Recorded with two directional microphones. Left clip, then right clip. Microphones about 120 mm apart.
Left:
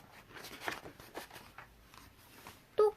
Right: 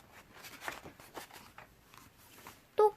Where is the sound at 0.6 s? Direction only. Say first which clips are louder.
Left 2 dB; 20° right (ahead or behind).